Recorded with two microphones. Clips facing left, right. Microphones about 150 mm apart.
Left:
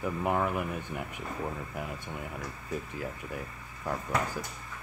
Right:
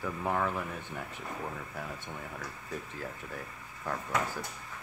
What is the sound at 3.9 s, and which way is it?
Speech, 10° left (ahead or behind).